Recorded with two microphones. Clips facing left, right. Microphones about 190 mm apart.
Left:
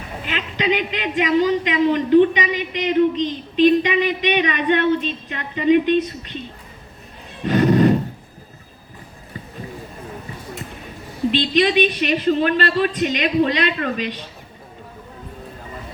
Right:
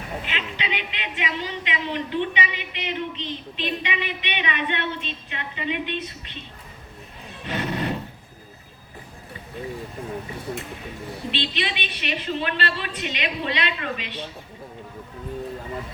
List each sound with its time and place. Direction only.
0.3 s a man's voice: 45° left (ahead or behind)
7.4 s neigh: 40° left (ahead or behind)
11.3 s a man's voice: 40° left (ahead or behind)